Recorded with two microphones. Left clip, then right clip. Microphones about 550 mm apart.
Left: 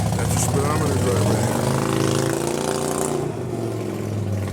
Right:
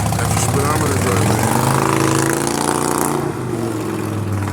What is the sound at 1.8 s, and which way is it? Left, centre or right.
Vehicle, centre.